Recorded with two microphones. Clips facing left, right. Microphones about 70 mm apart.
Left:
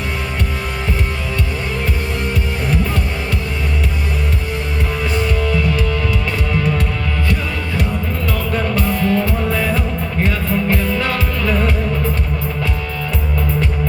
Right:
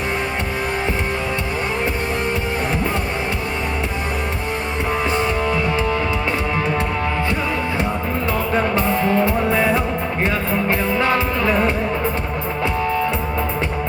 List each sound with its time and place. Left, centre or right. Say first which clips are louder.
5.1 s music: even; right
8.5 s music: right 1 dB; right